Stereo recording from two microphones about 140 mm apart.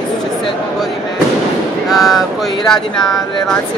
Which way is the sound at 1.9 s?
Centre (ahead or behind).